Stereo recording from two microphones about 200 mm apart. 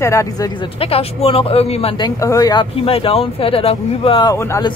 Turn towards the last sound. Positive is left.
turn(degrees=15)  # may be behind; listen again after turning